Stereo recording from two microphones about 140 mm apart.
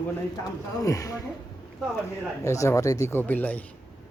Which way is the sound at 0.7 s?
25° left (ahead or behind).